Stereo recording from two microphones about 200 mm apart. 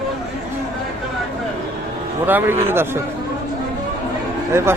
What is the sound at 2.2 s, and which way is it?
Speech, 10° right (ahead or behind).